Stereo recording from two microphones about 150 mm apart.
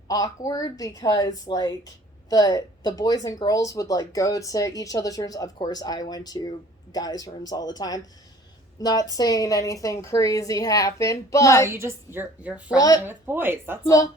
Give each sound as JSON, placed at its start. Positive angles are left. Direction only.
{"t": 0.1, "sound": "speech", "side_deg": 25}
{"t": 11.7, "sound": "a woman's voice", "side_deg": -15}
{"t": 12.6, "sound": "speech", "side_deg": 25}
{"t": 13.0, "sound": "a woman's voice", "side_deg": -15}
{"t": 13.8, "sound": "speech", "side_deg": 20}